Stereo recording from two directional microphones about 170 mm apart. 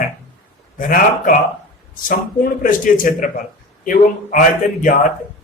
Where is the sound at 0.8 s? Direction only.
55° left (ahead or behind).